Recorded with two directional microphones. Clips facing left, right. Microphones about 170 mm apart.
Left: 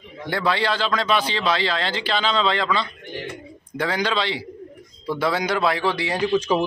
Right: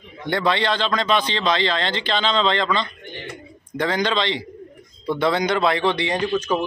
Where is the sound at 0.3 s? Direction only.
5° left (ahead or behind).